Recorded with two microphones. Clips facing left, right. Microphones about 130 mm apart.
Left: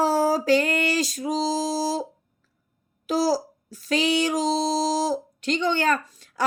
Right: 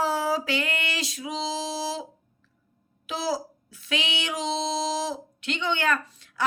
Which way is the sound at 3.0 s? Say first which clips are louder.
Left 7 dB; 40° left (ahead or behind).